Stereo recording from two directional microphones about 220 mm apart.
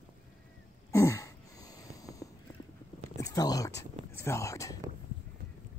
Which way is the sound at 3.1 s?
15° left (ahead or behind).